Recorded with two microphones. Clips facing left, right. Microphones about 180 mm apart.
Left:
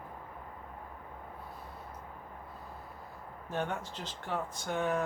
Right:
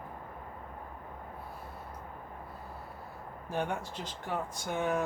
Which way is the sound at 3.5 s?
10° right (ahead or behind).